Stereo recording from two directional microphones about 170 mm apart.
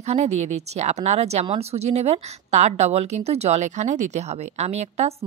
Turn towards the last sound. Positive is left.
turn(degrees=-40)  # may be behind; listen again after turning